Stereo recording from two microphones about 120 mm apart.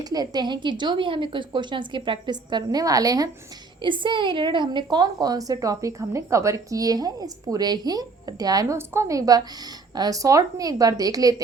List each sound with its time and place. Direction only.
0.0 s a woman's voice: 35° right (ahead or behind)
3.8 s a woman's voice: 45° right (ahead or behind)